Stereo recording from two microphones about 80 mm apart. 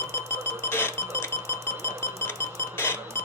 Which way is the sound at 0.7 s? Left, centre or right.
Left.